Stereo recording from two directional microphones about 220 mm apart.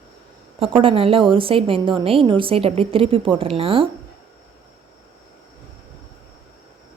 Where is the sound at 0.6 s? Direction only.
25° right (ahead or behind).